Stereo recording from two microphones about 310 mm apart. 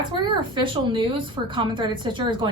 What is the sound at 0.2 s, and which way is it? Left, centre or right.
A woman's voice, centre.